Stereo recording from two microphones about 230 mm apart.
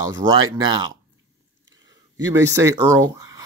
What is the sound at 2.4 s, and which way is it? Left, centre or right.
Speech, centre.